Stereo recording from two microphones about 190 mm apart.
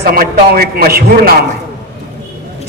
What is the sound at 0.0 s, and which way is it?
A man's voice, 50° right (ahead or behind).